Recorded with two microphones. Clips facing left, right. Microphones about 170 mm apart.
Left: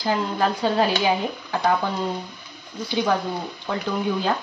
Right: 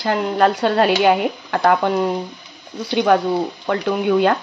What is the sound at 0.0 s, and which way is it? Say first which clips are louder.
Speech: right 6 dB; 70° right (ahead or behind).